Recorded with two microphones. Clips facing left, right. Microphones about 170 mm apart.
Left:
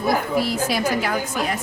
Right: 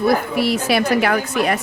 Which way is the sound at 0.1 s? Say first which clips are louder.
Right 3 dB; 70° right (ahead or behind).